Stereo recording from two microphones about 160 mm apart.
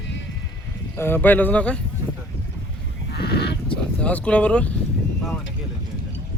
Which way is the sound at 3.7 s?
10° left (ahead or behind).